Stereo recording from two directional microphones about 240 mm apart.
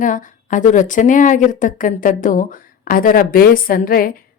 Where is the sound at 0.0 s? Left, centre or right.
Left.